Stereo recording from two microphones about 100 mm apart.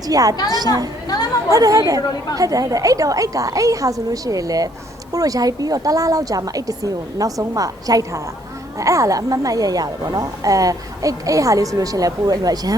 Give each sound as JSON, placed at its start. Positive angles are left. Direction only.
{"t": 0.1, "sound": "a woman's voice", "side_deg": -35}
{"t": 1.0, "sound": "chatter", "side_deg": 40}
{"t": 1.5, "sound": "a woman's voice", "side_deg": -35}